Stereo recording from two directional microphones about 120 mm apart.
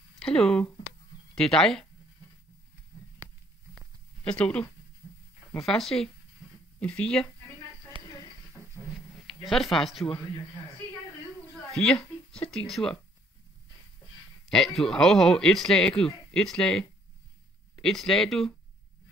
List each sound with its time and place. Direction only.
0.2 s speech: 5° left (ahead or behind)
4.2 s speech: 10° left (ahead or behind)
7.9 s a sound: 45° right (ahead or behind)
9.4 s speech: centre (ahead or behind)
11.5 s a woman's voice: 5° left (ahead or behind)
14.5 s speech: 5° left (ahead or behind)
17.8 s speech: 5° left (ahead or behind)